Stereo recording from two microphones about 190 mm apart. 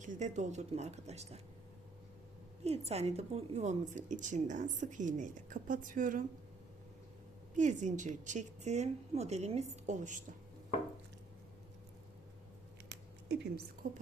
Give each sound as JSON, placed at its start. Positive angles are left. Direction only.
{"t": 0.0, "sound": "a woman's voice", "side_deg": -40}
{"t": 2.6, "sound": "a woman's voice", "side_deg": -35}
{"t": 7.5, "sound": "a woman's voice", "side_deg": -40}
{"t": 12.9, "sound": "a sound", "side_deg": -60}